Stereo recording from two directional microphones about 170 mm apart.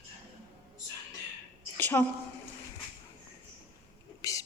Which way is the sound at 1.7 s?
10° left (ahead or behind).